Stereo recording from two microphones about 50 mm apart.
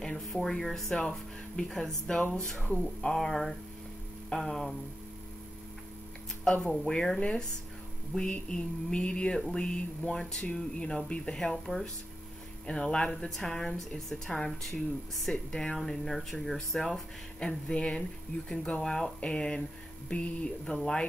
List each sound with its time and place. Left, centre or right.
0.0 s speech: centre
6.6 s speech: centre
7.2 s a sound: centre
9.5 s speech: centre